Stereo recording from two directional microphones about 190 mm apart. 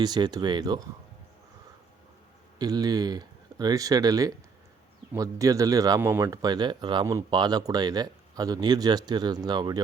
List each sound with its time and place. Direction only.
0.0 s speech: 20° right (ahead or behind)
2.6 s speech: 20° right (ahead or behind)